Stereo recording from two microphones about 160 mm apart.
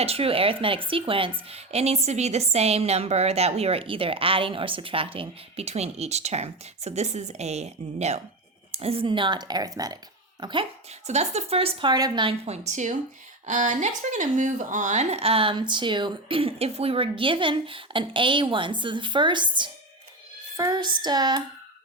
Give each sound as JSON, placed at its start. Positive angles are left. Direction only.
{"t": 0.0, "sound": "a woman's voice", "side_deg": -35}
{"t": 11.0, "sound": "a woman's voice", "side_deg": -45}